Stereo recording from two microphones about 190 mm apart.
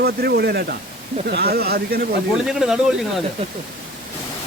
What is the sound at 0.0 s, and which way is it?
Speech, 55° right (ahead or behind).